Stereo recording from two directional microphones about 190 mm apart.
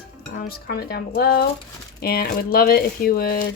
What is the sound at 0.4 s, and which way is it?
Speech, 55° left (ahead or behind).